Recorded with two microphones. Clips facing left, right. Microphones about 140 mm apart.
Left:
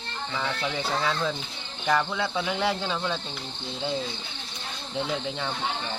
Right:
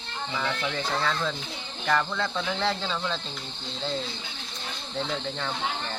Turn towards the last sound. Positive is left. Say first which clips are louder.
# left 1 dB
turn(degrees=10)  # may be behind; listen again after turning